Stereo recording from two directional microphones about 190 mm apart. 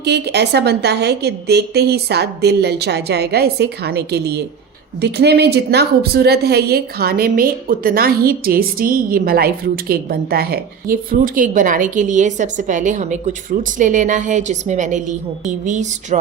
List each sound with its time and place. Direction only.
0.0 s a woman's voice: 60° right (ahead or behind); by 16.1 s 40° right (ahead or behind)